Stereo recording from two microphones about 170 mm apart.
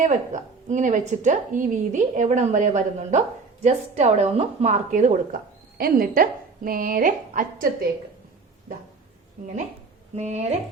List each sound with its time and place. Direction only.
0.7 s a woman's voice: 45° right (ahead or behind)
5.7 s speech: 60° right (ahead or behind)
10.2 s speech: 40° right (ahead or behind)